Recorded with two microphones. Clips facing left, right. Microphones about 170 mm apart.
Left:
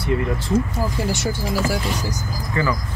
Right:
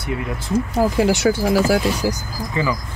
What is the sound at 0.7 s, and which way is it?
Speech, 75° right (ahead or behind).